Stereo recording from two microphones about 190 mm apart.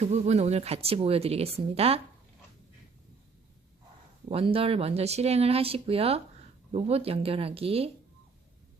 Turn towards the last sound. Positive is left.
turn(degrees=-30)  # may be behind; listen again after turning